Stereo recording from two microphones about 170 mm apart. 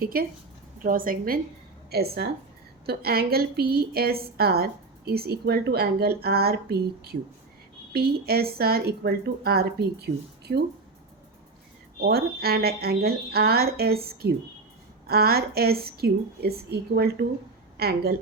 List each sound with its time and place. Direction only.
0.0 s a woman's voice: 60° right (ahead or behind)
1.9 s a woman's voice: 70° right (ahead or behind)
11.9 s speech: 65° right (ahead or behind)